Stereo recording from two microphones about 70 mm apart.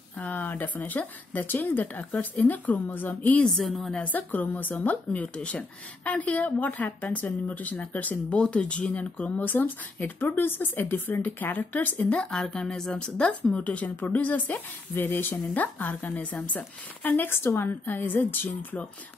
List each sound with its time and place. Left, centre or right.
0.2 s a woman's voice: left
3.4 s a woman's voice: centre
3.9 s a woman's voice: left
9.4 s a woman's voice: left
12.2 s a woman's voice: centre; by 18.8 s left